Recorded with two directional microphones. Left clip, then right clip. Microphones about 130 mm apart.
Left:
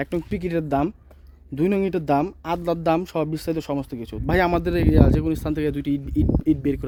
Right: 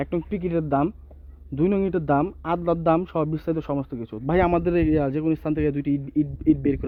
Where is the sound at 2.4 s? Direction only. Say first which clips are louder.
Right 1 dB; 25° left (ahead or behind).